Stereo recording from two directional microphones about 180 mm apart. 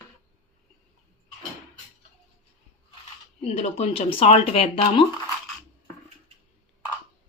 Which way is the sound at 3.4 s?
35° left (ahead or behind).